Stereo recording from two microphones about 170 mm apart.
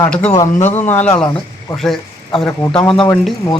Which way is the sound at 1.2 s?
25° left (ahead or behind).